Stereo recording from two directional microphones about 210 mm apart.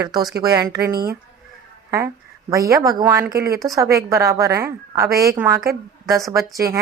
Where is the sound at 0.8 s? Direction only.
50° right (ahead or behind).